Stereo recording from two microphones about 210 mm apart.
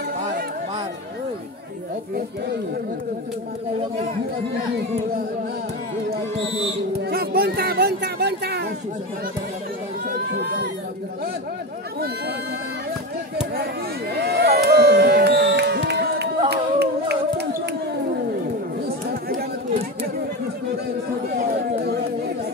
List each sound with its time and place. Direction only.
7.0 s speech: 45° right (ahead or behind)
10.0 s speech: 50° right (ahead or behind)
14.2 s a sound: 50° right (ahead or behind)
19.2 s chatter: 40° right (ahead or behind)
21.3 s chatter: 50° right (ahead or behind)